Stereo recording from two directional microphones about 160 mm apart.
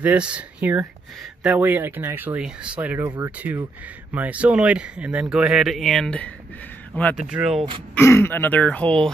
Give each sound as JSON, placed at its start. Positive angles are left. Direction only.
{"t": 0.0, "sound": "speech", "side_deg": -10}
{"t": 7.2, "sound": "speech", "side_deg": -5}
{"t": 7.9, "sound": "speech", "side_deg": 15}